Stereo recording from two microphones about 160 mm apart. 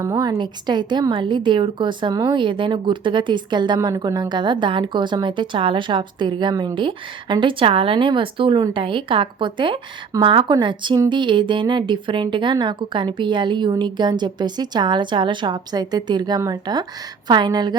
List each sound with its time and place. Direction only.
0.0 s a woman's voice: 20° right (ahead or behind)